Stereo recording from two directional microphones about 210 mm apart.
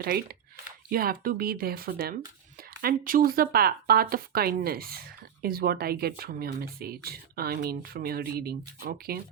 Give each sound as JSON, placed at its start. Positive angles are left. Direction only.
{"t": 0.0, "sound": "speech", "side_deg": -45}